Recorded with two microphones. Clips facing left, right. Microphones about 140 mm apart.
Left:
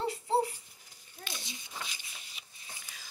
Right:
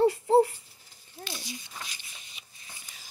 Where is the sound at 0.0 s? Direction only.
50° right (ahead or behind).